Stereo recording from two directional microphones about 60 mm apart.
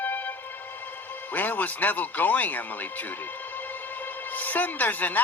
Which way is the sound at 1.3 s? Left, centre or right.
Left.